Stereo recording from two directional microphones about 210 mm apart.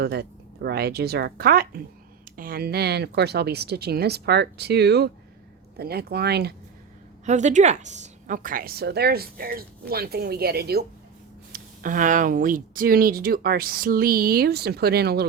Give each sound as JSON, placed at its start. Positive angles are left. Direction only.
{"t": 0.0, "sound": "speech", "side_deg": -50}
{"t": 7.3, "sound": "speech", "side_deg": -35}